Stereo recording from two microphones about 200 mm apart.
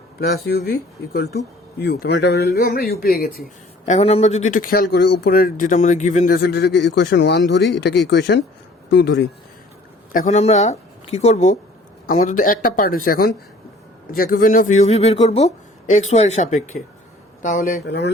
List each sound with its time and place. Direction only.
0.2 s a man's voice: 50° left (ahead or behind)
10.1 s a man's voice: 40° left (ahead or behind)
17.8 s speech: 55° left (ahead or behind)